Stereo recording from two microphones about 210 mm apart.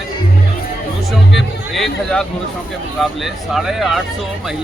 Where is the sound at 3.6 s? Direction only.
Centre (ahead or behind).